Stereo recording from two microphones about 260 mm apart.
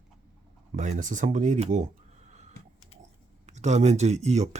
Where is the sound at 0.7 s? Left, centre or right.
Right.